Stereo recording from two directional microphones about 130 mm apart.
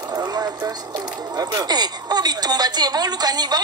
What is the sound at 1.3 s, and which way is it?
Speech, 30° right (ahead or behind).